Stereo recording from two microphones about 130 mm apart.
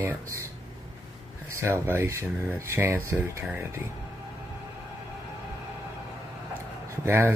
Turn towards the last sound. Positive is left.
turn(degrees=-20)  # may be behind; listen again after turning